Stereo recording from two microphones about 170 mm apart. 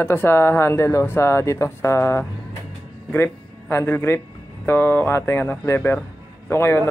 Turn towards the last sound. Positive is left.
turn(degrees=15)  # may be behind; listen again after turning